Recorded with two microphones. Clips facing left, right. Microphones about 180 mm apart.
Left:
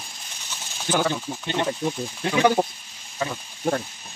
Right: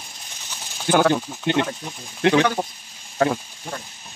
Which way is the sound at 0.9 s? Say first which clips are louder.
Right 6 dB; 60° right (ahead or behind).